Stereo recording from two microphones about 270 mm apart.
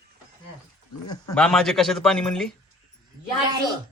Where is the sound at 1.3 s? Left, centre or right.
Centre.